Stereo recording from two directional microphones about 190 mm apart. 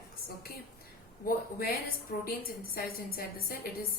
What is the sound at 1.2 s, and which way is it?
A woman's voice, 50° left (ahead or behind).